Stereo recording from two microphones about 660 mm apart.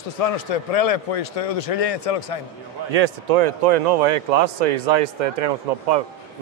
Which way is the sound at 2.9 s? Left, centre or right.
Right.